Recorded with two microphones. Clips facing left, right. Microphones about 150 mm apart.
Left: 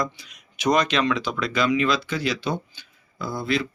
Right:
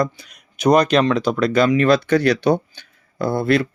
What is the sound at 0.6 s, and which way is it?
Speech, 40° right (ahead or behind).